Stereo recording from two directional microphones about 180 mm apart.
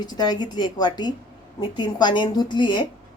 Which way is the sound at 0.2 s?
25° left (ahead or behind).